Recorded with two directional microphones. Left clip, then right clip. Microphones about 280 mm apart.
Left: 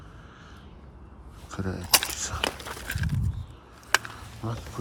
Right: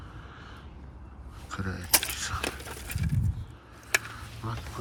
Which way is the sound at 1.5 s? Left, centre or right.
Centre.